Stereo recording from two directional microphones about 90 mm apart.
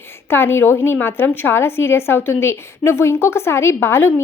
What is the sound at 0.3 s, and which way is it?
A woman's voice, 25° left (ahead or behind).